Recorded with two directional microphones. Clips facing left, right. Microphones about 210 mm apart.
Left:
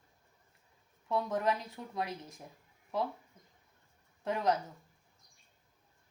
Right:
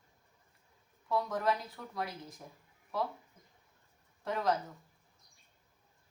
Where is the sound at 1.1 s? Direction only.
20° left (ahead or behind).